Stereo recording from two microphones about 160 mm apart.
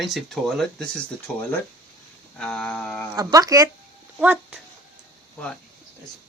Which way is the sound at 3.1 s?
20° right (ahead or behind).